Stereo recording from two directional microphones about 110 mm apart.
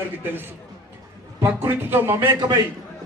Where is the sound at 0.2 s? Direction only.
20° right (ahead or behind).